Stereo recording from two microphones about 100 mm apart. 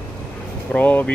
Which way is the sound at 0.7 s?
15° left (ahead or behind).